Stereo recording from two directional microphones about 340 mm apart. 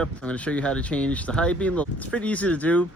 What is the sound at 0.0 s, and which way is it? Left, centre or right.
Speech, centre.